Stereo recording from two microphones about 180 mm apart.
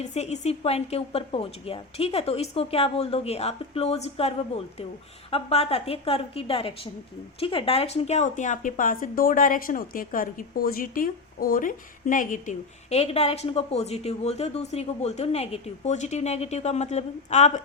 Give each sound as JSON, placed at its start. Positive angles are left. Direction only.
{"t": 0.0, "sound": "speech", "side_deg": 40}